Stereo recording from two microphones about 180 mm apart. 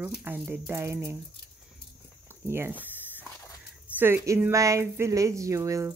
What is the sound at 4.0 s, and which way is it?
Speech, 10° right (ahead or behind).